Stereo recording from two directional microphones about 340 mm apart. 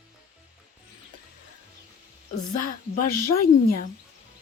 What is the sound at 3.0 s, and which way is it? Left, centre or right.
Speech, left.